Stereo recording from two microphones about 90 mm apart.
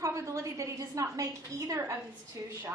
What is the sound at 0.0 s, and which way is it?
A woman's voice, 35° right (ahead or behind).